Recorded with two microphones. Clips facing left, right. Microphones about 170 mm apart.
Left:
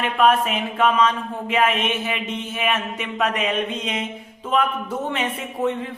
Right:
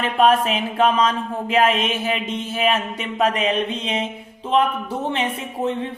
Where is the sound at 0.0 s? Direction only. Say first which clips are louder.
Right 1 dB; 35° right (ahead or behind).